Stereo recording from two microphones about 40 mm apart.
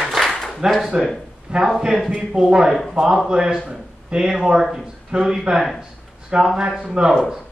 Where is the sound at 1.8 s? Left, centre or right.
Centre.